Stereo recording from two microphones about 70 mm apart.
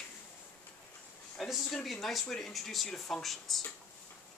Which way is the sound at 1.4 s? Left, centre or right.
Centre.